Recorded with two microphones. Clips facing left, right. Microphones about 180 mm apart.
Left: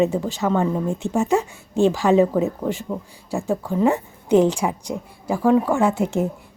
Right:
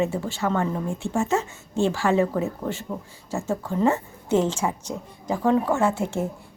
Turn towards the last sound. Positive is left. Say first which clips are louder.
# left 4 dB
turn(degrees=15)  # may be behind; listen again after turning